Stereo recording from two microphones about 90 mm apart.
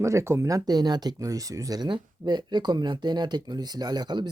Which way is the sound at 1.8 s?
60° right (ahead or behind).